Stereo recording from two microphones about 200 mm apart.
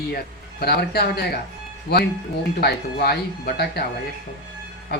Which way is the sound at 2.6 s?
50° left (ahead or behind).